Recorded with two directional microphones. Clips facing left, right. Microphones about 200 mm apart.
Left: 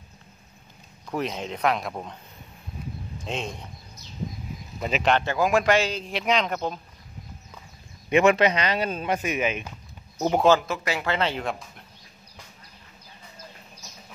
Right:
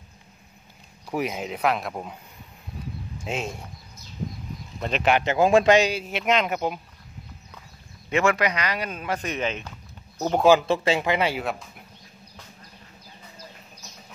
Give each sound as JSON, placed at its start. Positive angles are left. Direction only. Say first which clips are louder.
{"t": 1.1, "sound": "speech", "louder": "right 1 dB", "side_deg": -10}
{"t": 3.3, "sound": "a man's voice", "louder": "right 2 dB", "side_deg": -5}
{"t": 4.7, "sound": "a man's voice", "louder": "even", "side_deg": 5}
{"t": 5.2, "sound": "a man's voice", "louder": "right 4 dB", "side_deg": -25}
{"t": 8.1, "sound": "speech", "louder": "left 4 dB", "side_deg": 20}
{"t": 9.2, "sound": "speech", "louder": "left 2 dB", "side_deg": 10}
{"t": 10.7, "sound": "speech", "louder": "right 6 dB", "side_deg": -25}
{"t": 11.1, "sound": "a man's voice", "louder": "right 2 dB", "side_deg": -10}